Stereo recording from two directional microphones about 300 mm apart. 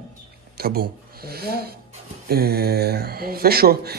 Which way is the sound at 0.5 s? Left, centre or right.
Right.